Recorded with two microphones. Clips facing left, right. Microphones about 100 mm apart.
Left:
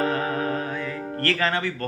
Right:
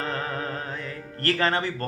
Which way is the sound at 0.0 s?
30° right (ahead or behind).